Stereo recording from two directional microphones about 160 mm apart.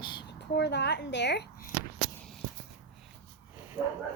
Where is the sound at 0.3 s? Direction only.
90° left.